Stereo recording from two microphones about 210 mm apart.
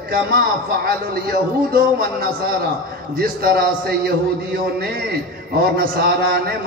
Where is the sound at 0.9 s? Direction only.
45° right (ahead or behind).